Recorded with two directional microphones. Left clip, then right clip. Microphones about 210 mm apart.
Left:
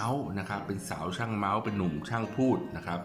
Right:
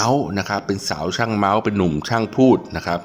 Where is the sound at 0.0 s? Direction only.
45° right (ahead or behind).